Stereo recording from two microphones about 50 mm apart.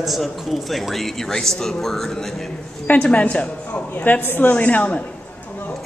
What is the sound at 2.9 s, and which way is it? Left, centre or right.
Speech, left.